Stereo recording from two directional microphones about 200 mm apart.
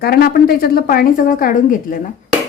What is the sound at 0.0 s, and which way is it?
A woman's voice, 50° left (ahead or behind).